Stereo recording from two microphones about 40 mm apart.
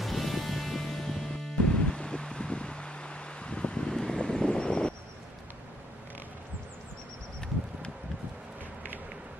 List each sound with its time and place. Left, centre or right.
0.0 s music: centre; by 3.9 s left
3.9 s vehicle: centre